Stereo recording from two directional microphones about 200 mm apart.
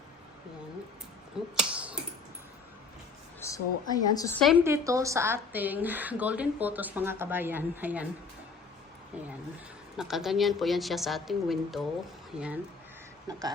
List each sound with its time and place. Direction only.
1.5 s finger snapping: 5° right (ahead or behind)
3.4 s a woman's voice: 15° left (ahead or behind)
4.5 s a woman's voice: 15° right (ahead or behind)
9.1 s a woman's voice: 5° right (ahead or behind)